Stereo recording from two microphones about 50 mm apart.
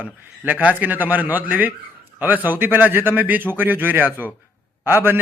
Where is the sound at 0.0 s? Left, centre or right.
Right.